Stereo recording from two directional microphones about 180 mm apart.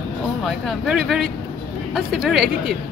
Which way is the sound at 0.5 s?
Centre (ahead or behind).